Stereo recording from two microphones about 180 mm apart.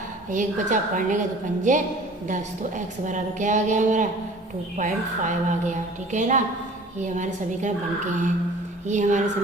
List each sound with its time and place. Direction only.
0.3 s a woman's voice: 45° right (ahead or behind)
8.9 s a woman's voice: 45° right (ahead or behind)